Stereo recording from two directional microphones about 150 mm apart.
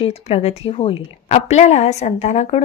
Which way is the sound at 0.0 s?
40° left (ahead or behind).